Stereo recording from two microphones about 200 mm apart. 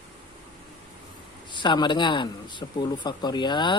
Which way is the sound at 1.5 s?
25° left (ahead or behind).